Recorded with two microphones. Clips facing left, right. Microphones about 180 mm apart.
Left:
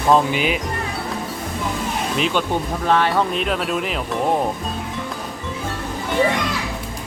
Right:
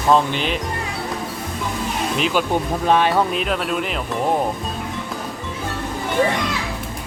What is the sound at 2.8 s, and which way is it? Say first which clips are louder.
Speech: right 1 dB; 15° right (ahead or behind).